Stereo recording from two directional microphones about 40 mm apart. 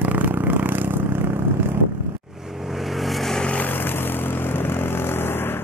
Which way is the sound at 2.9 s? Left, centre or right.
Centre.